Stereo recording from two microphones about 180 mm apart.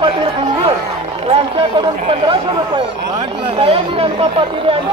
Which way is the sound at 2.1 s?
30° right (ahead or behind).